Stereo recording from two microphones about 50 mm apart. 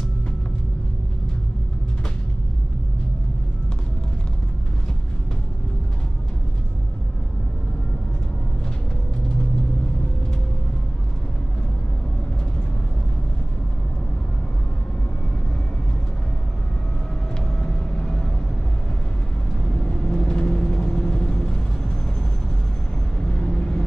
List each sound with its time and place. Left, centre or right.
17.6 s vehicle: centre
19.7 s vehicle: centre
23.2 s vehicle: centre